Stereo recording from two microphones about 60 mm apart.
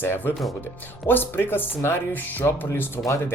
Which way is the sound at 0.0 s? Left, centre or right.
Left.